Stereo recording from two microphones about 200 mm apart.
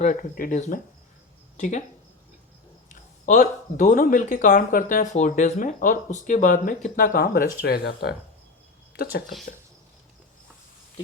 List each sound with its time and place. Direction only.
0.0 s speech: 40° left (ahead or behind)
2.9 s speech: 40° left (ahead or behind)